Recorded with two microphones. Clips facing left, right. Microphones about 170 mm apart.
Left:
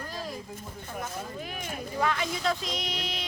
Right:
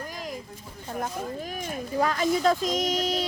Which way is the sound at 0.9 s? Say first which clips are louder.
Right 5 dB; 40° right (ahead or behind).